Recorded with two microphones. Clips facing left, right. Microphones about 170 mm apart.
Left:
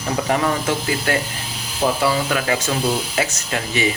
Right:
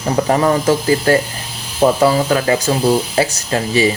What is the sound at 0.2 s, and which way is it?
Speech, 40° right (ahead or behind).